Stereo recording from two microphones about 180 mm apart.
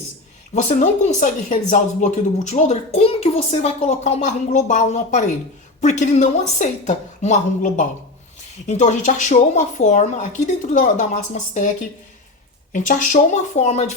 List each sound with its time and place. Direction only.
0.5 s speech: 45° left (ahead or behind)